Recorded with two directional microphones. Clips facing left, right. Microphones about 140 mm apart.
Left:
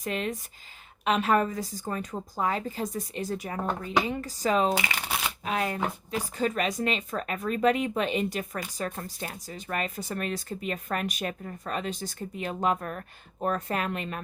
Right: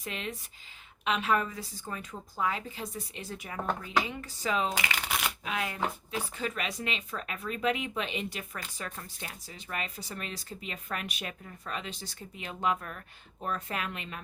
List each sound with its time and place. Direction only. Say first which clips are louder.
0.0 s speech: left 7 dB; 45° left (ahead or behind)